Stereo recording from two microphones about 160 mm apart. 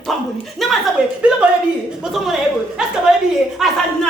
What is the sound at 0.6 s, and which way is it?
A man's voice, centre (ahead or behind).